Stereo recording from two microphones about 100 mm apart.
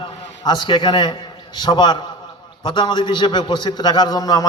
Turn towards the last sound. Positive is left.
turn(degrees=40)  # may be behind; listen again after turning